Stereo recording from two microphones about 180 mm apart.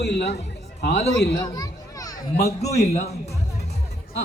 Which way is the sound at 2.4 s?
40° left (ahead or behind).